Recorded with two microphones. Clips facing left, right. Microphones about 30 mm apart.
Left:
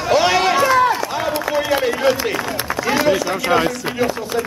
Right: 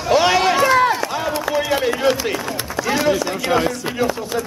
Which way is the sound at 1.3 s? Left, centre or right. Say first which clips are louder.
Left 1 dB; centre.